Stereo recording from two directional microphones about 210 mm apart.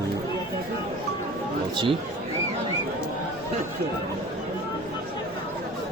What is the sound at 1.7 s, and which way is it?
Speech, 20° right (ahead or behind).